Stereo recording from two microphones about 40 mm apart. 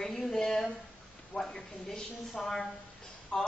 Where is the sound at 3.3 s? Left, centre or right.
Centre.